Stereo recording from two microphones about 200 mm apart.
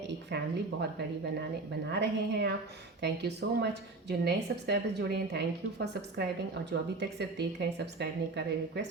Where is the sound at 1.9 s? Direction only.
55° right (ahead or behind).